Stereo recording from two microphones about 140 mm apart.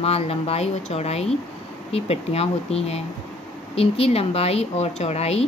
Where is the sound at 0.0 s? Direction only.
45° left (ahead or behind).